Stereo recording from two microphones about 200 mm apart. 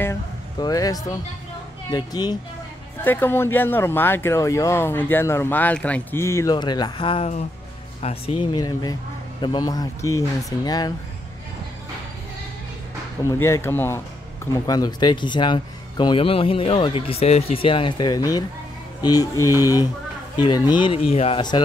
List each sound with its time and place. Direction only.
0.0 s a sound: 15° left (ahead or behind)
1.9 s speech: 20° left (ahead or behind)
3.0 s speech: 10° left (ahead or behind)
13.2 s speech: 15° left (ahead or behind)